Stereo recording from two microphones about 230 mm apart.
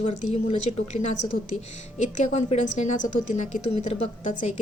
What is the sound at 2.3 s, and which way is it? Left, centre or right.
Speech, left.